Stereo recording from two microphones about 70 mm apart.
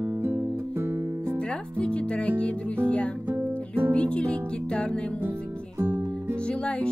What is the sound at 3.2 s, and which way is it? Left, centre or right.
Guitar, right.